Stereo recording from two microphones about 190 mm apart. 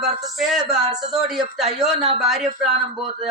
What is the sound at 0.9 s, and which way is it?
Speech, 20° right (ahead or behind).